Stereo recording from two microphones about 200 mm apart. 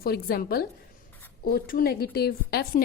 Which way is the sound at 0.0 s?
50° left (ahead or behind).